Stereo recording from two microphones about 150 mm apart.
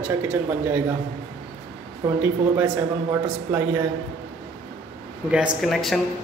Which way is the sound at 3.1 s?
15° right (ahead or behind).